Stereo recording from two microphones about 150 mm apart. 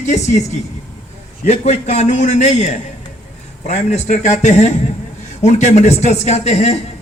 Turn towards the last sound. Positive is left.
turn(degrees=45)  # may be behind; listen again after turning